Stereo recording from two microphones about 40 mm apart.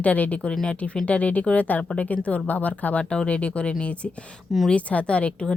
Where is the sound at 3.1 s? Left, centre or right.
Left.